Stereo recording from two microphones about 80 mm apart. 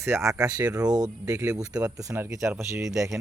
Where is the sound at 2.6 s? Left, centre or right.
Right.